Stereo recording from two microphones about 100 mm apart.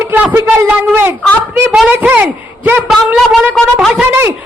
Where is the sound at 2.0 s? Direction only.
15° right (ahead or behind).